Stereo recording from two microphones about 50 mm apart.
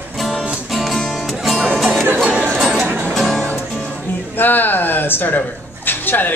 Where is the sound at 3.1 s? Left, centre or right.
Centre.